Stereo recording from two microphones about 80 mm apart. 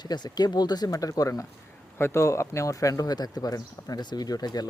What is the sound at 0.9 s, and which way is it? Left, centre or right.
Speech, left.